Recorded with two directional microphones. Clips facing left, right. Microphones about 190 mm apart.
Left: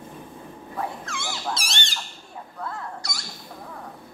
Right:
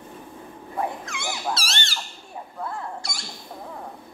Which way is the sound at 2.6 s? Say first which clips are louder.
Right 2 dB; 20° right (ahead or behind).